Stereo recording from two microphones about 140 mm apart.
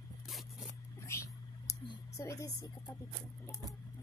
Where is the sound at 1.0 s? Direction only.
20° left (ahead or behind).